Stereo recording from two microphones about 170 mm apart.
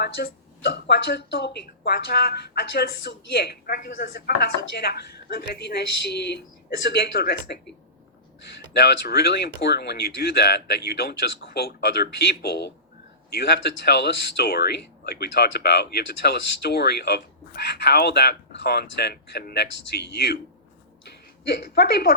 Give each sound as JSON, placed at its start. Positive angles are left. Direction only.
{"t": 0.0, "sound": "speech", "side_deg": 75}
{"t": 8.7, "sound": "speech", "side_deg": 70}
{"t": 21.4, "sound": "speech", "side_deg": 70}